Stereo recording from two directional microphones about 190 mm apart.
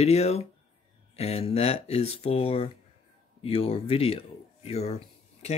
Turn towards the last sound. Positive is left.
turn(degrees=35)  # may be behind; listen again after turning